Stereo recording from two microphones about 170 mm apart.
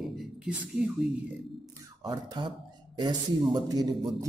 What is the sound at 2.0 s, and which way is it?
A man's voice, 25° right (ahead or behind).